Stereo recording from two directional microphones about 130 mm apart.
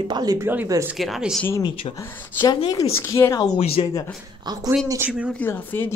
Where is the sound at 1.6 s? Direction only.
45° left (ahead or behind).